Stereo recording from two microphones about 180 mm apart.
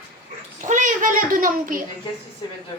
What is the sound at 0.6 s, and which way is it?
A child's voice, 45° right (ahead or behind).